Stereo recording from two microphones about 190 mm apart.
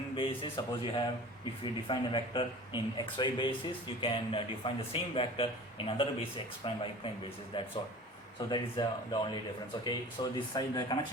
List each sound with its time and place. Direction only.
0.2 s speech: 25° left (ahead or behind)